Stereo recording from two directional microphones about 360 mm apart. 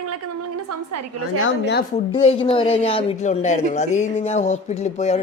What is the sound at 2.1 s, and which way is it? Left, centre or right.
Speech, centre.